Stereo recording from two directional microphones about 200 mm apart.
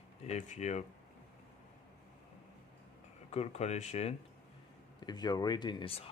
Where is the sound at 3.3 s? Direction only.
35° left (ahead or behind).